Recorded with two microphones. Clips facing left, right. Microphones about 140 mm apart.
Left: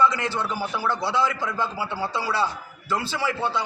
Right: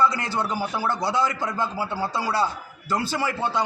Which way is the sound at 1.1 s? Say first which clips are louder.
Even; 45° right (ahead or behind).